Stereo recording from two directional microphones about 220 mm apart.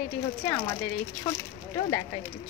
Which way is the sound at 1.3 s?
20° left (ahead or behind).